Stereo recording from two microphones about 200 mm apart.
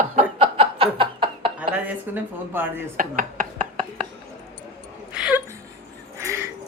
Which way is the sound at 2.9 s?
40° right (ahead or behind).